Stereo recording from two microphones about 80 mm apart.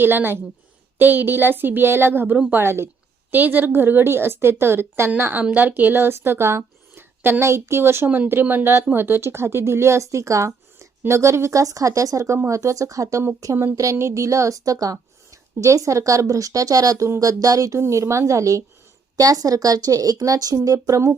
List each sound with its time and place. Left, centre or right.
0.0 s a woman's voice: right
20.7 s speech: right